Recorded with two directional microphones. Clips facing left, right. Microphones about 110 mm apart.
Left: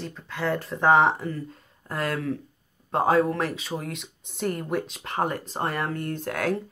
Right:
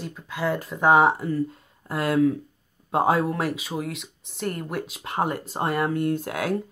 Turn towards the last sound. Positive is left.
turn(degrees=-5)  # may be behind; listen again after turning